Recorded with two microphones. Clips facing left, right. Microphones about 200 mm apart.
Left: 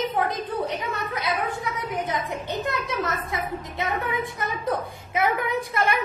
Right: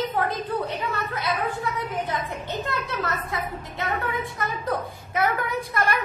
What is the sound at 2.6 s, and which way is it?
A woman's voice, 20° left (ahead or behind).